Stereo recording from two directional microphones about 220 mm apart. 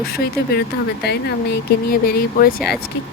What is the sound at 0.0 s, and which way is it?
Speech, 45° left (ahead or behind).